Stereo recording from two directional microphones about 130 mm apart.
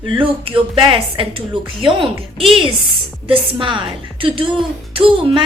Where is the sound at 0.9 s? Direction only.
45° right (ahead or behind).